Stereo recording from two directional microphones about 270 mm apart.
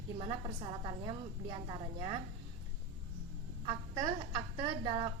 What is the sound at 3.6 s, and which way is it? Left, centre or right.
A woman's voice, centre.